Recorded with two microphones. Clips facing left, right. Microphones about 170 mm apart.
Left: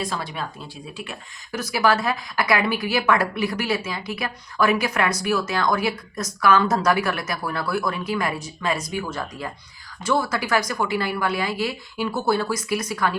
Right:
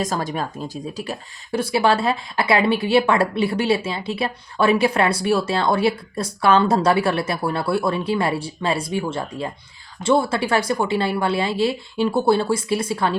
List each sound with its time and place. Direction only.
0.0 s speech: 45° right (ahead or behind)
1.5 s speech: 30° right (ahead or behind)